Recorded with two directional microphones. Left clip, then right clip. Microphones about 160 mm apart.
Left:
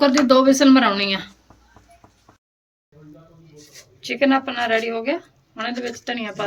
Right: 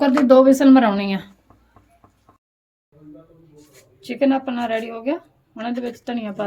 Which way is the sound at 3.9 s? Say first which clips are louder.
Left 1 dB; 50° right (ahead or behind).